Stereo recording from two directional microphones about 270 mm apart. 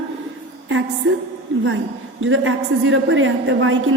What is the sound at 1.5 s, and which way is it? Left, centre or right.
A woman's voice, right.